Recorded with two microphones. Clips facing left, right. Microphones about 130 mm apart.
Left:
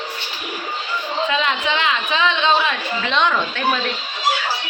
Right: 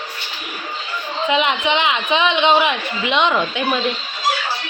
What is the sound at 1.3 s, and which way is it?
A woman's voice, 20° right (ahead or behind).